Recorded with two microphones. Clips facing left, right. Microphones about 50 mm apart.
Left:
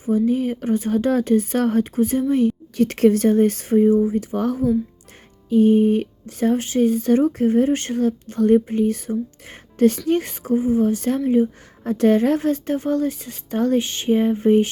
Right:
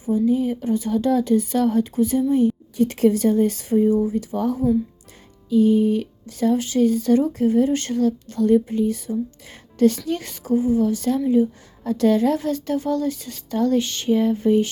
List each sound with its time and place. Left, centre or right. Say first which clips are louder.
0.0 s a woman's voice: even; left
2.3 s a woman's voice: even; left
3.8 s speech: left 3 dB; left